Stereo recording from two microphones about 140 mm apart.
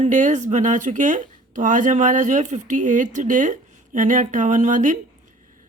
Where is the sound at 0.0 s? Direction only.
65° right (ahead or behind).